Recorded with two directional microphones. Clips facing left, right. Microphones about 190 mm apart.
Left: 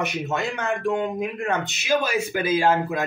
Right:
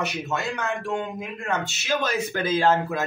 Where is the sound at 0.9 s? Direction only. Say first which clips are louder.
Left 4 dB; 15° left (ahead or behind).